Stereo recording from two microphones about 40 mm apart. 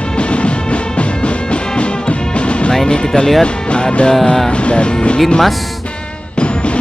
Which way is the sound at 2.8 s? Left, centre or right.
Left.